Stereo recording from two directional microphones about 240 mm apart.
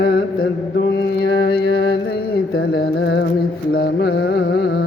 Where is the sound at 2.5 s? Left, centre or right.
Left.